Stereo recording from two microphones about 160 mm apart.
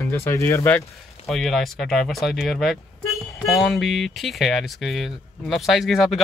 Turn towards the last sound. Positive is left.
turn(degrees=0)  # may be behind; listen again after turning